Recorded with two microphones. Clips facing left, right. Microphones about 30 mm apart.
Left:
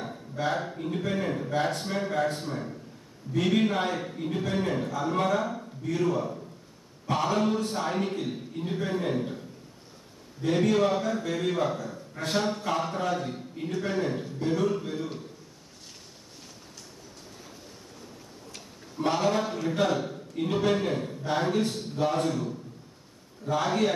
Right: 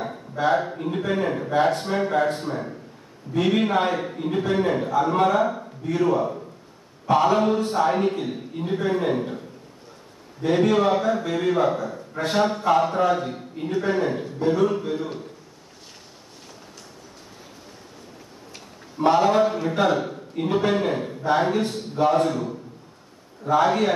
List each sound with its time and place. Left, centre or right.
0.0 s a man's voice: centre
10.4 s a man's voice: centre
18.9 s a man's voice: centre